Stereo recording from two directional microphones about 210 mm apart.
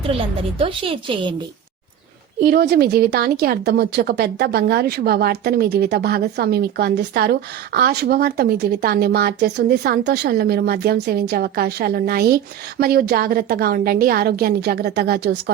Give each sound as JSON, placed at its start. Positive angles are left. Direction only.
{"t": 0.6, "sound": "a woman's voice", "side_deg": -25}
{"t": 2.4, "sound": "a woman's voice", "side_deg": -50}